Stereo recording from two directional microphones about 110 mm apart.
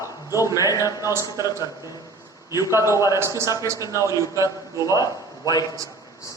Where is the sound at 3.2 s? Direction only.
25° right (ahead or behind).